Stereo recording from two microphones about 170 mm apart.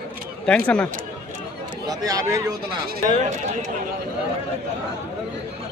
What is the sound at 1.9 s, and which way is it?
Speech, 20° right (ahead or behind).